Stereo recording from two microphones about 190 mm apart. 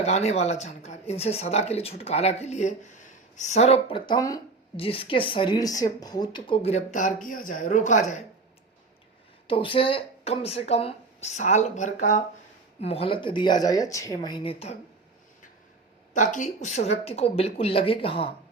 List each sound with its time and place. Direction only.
0.0 s speech: 35° left (ahead or behind)
9.5 s speech: 25° left (ahead or behind)
12.8 s speech: 30° left (ahead or behind)
16.1 s speech: 40° left (ahead or behind)